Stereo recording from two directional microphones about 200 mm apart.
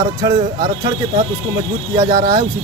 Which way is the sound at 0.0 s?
20° right (ahead or behind).